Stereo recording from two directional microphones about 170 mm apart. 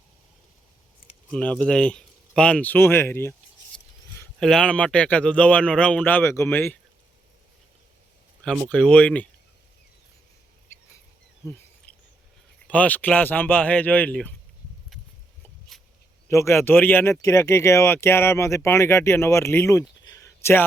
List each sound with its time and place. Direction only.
1.3 s speech: 5° left (ahead or behind)
4.4 s speech: 5° left (ahead or behind)
8.7 s speech: 5° left (ahead or behind)
12.6 s speech: 10° left (ahead or behind)
15.7 s a sound: centre (ahead or behind)
16.3 s speech: 15° left (ahead or behind)